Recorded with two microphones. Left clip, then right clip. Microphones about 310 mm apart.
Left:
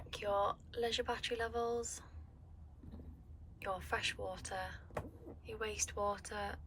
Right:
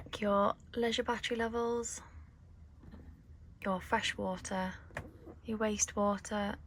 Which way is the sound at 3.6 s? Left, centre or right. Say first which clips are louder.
Right 5 dB; centre.